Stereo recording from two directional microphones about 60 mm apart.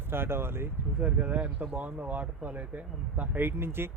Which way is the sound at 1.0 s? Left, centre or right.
Right.